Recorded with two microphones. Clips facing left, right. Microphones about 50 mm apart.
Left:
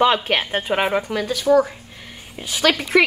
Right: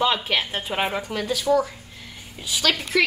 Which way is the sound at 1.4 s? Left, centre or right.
Centre.